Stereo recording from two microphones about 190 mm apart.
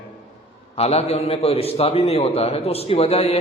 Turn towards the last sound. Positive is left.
turn(degrees=35)  # may be behind; listen again after turning